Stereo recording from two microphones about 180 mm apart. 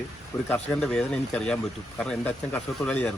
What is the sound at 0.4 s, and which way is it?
Speech, 5° left (ahead or behind).